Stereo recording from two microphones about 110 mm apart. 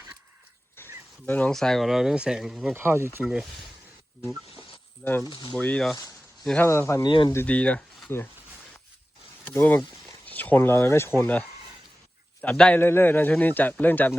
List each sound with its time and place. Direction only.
0.8 s a sound: 20° left (ahead or behind)
1.3 s speech: 10° left (ahead or behind)
2.7 s speech: 20° right (ahead or behind)
3.2 s speech: centre (ahead or behind)
5.0 s speech: 10° left (ahead or behind)
6.7 s speech: 25° left (ahead or behind)
7.0 s speech: 50° left (ahead or behind)
7.4 s speech: 10° left (ahead or behind)
9.5 s speech: 20° left (ahead or behind)
12.4 s a man's voice: 10° left (ahead or behind)